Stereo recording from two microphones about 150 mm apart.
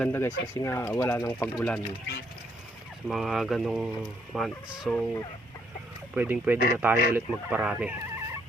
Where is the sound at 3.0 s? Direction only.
5° right (ahead or behind).